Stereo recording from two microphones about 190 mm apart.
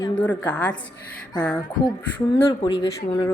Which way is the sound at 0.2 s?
5° left (ahead or behind).